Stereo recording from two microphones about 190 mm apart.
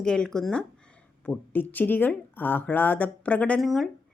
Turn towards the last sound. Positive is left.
turn(degrees=0)  # may be behind; listen again after turning